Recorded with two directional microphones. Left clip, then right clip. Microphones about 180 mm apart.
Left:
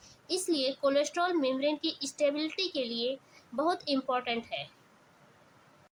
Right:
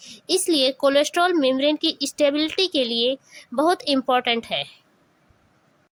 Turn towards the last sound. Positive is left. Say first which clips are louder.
# right 11 dB
turn(degrees=-50)  # may be behind; listen again after turning